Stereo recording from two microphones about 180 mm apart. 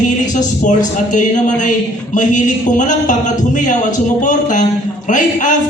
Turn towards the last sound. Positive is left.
turn(degrees=45)  # may be behind; listen again after turning